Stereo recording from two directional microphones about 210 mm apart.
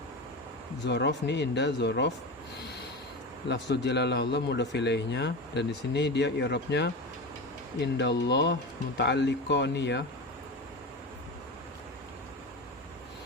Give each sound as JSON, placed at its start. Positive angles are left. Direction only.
{"t": 0.9, "sound": "speech", "side_deg": 55}
{"t": 3.5, "sound": "speech", "side_deg": 55}